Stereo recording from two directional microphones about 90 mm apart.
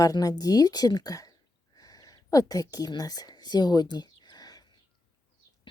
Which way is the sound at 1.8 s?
45° left (ahead or behind).